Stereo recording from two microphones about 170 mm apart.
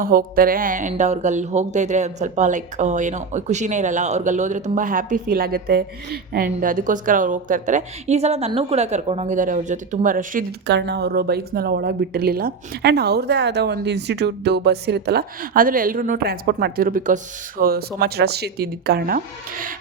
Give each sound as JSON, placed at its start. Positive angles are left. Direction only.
{"t": 0.0, "sound": "speech", "side_deg": -55}
{"t": 10.7, "sound": "a woman's voice", "side_deg": -90}